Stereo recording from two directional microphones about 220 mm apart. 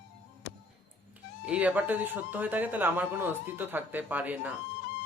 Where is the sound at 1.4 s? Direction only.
5° right (ahead or behind).